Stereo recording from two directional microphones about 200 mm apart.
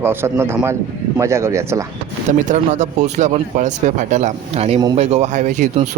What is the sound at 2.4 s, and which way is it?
Speech, 40° right (ahead or behind).